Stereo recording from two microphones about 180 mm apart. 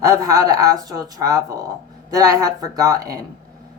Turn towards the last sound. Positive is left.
turn(degrees=-20)  # may be behind; listen again after turning